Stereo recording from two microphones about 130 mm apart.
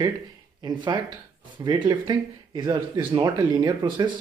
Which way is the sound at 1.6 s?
30° right (ahead or behind).